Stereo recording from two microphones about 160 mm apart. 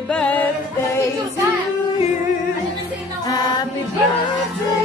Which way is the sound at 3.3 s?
25° left (ahead or behind).